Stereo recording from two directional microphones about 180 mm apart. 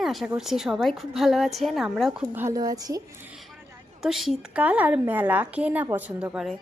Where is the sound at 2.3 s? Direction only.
15° right (ahead or behind).